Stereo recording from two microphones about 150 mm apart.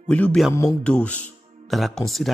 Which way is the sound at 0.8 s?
10° left (ahead or behind).